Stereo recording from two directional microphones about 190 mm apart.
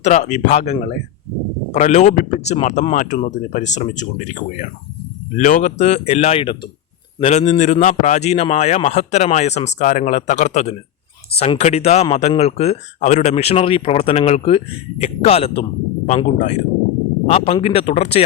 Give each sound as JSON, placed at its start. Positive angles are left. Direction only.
{"t": 0.0, "sound": "a man's voice", "side_deg": 35}